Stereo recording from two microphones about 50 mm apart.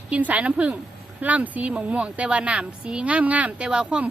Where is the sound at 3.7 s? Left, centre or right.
Centre.